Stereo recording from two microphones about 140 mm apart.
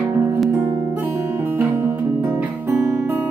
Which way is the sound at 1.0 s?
15° right (ahead or behind).